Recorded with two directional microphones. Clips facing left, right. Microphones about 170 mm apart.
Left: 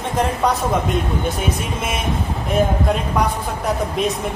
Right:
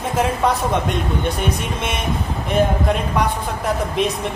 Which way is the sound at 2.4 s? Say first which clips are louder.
Even; centre (ahead or behind).